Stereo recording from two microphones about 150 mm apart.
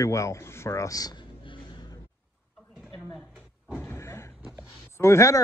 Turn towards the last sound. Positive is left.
turn(degrees=20)  # may be behind; listen again after turning